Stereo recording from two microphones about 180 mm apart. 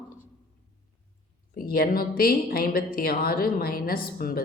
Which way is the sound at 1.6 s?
55° left (ahead or behind).